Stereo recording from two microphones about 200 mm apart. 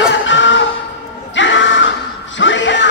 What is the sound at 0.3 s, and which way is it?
Music, 70° left (ahead or behind).